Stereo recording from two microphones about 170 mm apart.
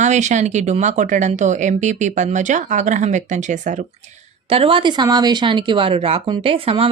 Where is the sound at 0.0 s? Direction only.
45° right (ahead or behind).